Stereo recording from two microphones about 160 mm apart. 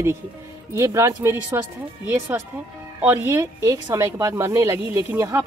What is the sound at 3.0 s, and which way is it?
Speech, 15° right (ahead or behind).